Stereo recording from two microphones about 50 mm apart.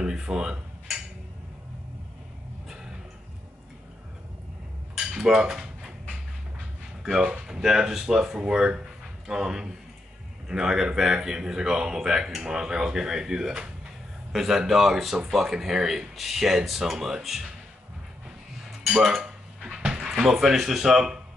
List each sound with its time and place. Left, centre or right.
0.0 s cutlery: centre
4.9 s cutlery: centre
7.0 s a sound: centre
7.4 s a man's voice: centre
18.9 s dishes: centre
20.1 s speech: centre